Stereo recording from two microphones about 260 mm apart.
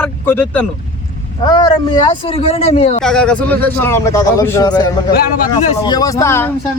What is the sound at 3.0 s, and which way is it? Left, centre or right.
A man's voice, centre.